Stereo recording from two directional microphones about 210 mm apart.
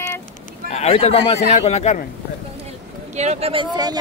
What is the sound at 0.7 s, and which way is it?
A man's voice, 30° left (ahead or behind).